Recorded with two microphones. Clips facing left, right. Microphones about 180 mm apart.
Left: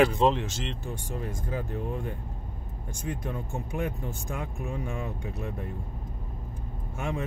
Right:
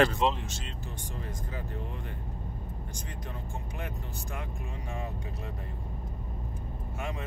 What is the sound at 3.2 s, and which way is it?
Speech, 50° left (ahead or behind).